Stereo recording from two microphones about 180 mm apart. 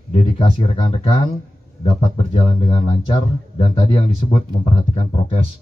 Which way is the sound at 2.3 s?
30° left (ahead or behind).